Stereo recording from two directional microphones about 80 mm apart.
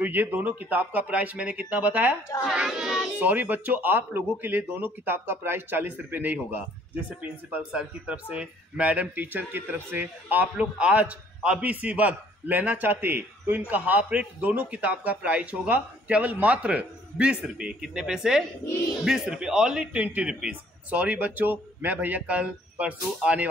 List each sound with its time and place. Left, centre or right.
0.0 s speech: right
2.4 s speech: centre
3.2 s a man's voice: right